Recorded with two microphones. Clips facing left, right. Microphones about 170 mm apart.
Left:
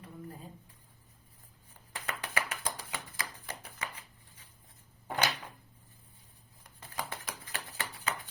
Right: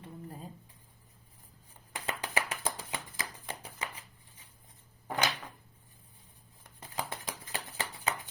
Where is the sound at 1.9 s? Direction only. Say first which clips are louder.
Right 3 dB; 20° right (ahead or behind).